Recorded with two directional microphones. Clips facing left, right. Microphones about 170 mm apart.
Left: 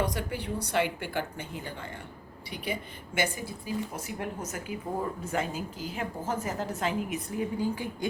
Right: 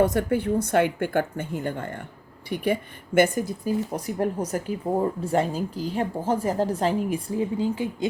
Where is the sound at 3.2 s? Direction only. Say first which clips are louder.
Right 11 dB; 45° right (ahead or behind).